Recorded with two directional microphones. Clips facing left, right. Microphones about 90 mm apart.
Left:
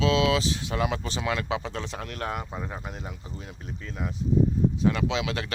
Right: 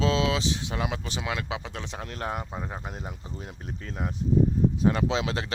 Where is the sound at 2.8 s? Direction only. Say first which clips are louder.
Even; 35° right (ahead or behind).